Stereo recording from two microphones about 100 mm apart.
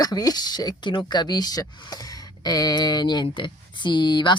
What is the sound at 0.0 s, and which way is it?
Speech, 40° left (ahead or behind).